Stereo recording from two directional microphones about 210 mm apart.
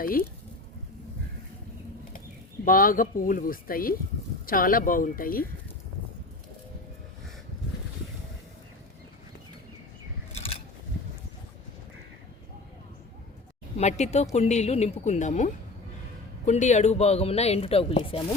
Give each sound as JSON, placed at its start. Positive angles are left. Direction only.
{"t": 0.0, "sound": "speech", "side_deg": 45}
{"t": 2.6, "sound": "speech", "side_deg": 40}
{"t": 10.3, "sound": "scissors", "side_deg": 25}
{"t": 13.7, "sound": "speech", "side_deg": 35}